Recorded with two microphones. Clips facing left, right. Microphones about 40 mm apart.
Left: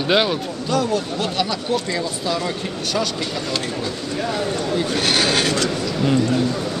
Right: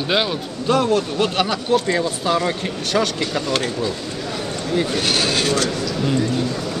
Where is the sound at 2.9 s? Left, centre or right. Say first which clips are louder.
Right 4 dB; right.